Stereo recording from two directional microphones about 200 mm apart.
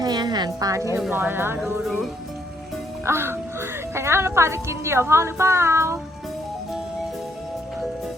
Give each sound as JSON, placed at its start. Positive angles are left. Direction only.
{"t": 0.0, "sound": "music", "side_deg": -20}
{"t": 0.9, "sound": "a woman's voice", "side_deg": -10}
{"t": 3.0, "sound": "a woman's voice", "side_deg": -10}